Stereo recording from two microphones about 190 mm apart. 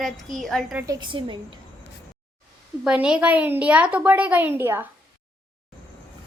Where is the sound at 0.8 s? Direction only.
20° right (ahead or behind).